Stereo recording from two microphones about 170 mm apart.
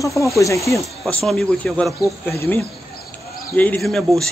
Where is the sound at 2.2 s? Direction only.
15° left (ahead or behind).